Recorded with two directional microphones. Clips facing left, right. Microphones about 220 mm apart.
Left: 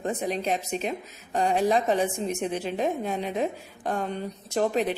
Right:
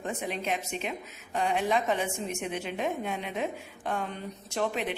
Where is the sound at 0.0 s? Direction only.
35° left (ahead or behind).